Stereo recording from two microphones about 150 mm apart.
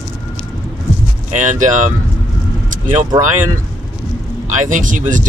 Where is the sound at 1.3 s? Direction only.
60° right (ahead or behind).